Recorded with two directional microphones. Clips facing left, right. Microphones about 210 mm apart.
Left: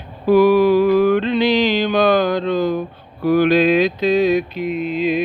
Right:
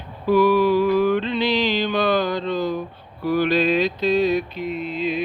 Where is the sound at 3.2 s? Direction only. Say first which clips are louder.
Left 5 dB; 50° left (ahead or behind).